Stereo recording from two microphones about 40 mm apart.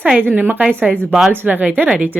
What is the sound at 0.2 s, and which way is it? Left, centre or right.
Speech, right.